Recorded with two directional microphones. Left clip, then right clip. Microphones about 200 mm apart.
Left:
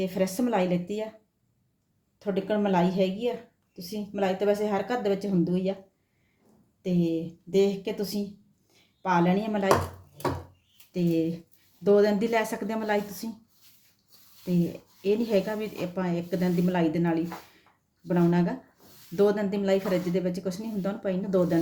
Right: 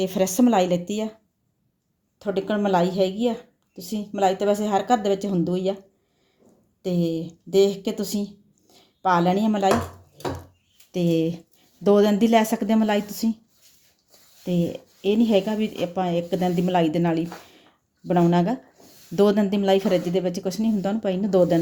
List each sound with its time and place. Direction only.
0.0 s speech: 50° right (ahead or behind)
2.1 s speech: 45° right (ahead or behind)
6.8 s speech: 45° right (ahead or behind)
10.9 s speech: 45° right (ahead or behind)
15.0 s speech: 40° right (ahead or behind)